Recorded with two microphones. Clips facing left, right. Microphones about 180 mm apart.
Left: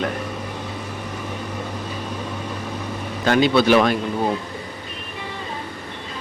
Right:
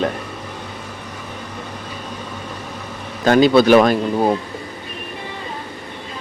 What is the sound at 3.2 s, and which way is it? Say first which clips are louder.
Speech: right 5 dB; 40° right (ahead or behind).